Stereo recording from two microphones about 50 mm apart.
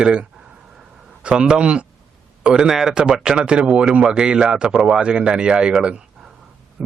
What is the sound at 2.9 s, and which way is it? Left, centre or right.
A man's voice, centre.